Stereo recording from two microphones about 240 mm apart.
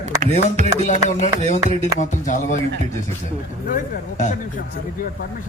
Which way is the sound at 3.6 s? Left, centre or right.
Left.